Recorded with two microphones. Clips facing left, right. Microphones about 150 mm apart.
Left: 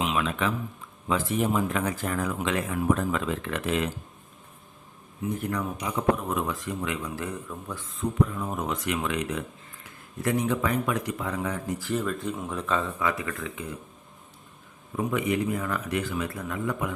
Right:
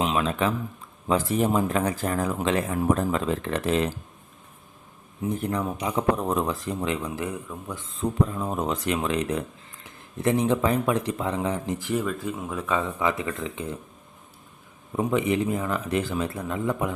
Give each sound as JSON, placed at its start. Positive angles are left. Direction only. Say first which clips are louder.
{"t": 0.0, "sound": "speech", "louder": "right 3 dB", "side_deg": -35}
{"t": 5.2, "sound": "speech", "louder": "right 3 dB", "side_deg": -30}
{"t": 7.2, "sound": "speech", "louder": "right 2 dB", "side_deg": -15}
{"t": 7.9, "sound": "speech", "louder": "right 1 dB", "side_deg": -30}
{"t": 12.0, "sound": "speech", "louder": "right 1 dB", "side_deg": 0}
{"t": 14.9, "sound": "speech", "louder": "right 3 dB", "side_deg": -25}